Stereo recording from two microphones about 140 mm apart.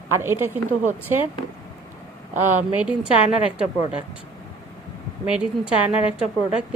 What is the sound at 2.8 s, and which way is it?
Speech, 5° right (ahead or behind).